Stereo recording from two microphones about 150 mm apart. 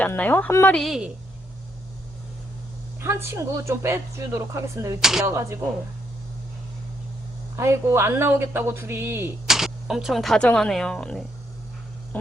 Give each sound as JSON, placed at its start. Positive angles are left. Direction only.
{"t": 0.0, "sound": "speech", "side_deg": 10}
{"t": 0.8, "sound": "a woman's voice", "side_deg": -5}
{"t": 3.0, "sound": "a woman's voice", "side_deg": -15}
{"t": 4.9, "sound": "a woman's voice", "side_deg": -5}
{"t": 5.2, "sound": "speech", "side_deg": -20}
{"t": 7.5, "sound": "speech", "side_deg": -20}
{"t": 9.5, "sound": "speech", "side_deg": -5}